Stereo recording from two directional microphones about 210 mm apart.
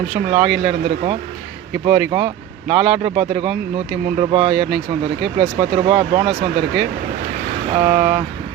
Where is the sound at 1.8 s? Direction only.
5° right (ahead or behind).